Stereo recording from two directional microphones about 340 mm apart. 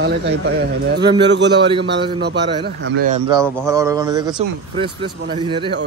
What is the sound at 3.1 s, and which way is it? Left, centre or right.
Speech, centre.